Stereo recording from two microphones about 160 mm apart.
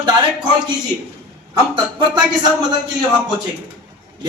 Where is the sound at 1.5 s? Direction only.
30° right (ahead or behind).